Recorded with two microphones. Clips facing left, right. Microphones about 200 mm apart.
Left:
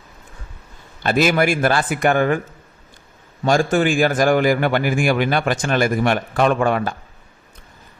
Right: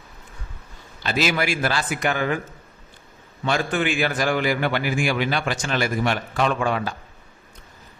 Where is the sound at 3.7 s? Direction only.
45° left (ahead or behind).